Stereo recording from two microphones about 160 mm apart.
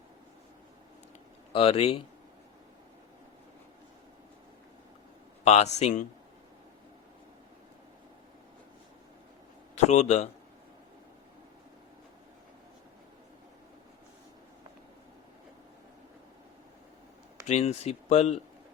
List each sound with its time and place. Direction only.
1.5 s speech: 40° left (ahead or behind)
5.5 s speech: 45° left (ahead or behind)
9.7 s speech: 45° left (ahead or behind)
17.4 s speech: 40° left (ahead or behind)